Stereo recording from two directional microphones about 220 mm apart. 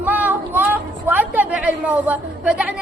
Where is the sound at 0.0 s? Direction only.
5° right (ahead or behind).